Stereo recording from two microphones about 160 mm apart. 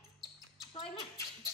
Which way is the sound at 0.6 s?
25° left (ahead or behind).